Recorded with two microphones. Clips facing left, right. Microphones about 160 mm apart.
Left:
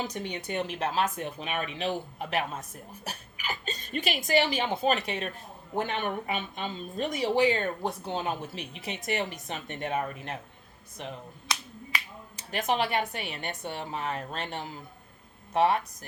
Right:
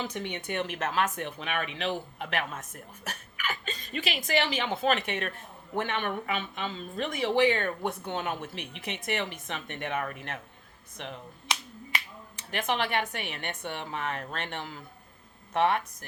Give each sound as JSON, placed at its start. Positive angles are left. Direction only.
{"t": 0.1, "sound": "a woman's voice", "side_deg": 40}
{"t": 12.4, "sound": "speech", "side_deg": 40}